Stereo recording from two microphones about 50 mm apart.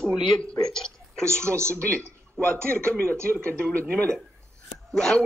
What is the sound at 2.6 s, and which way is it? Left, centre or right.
Speech, left.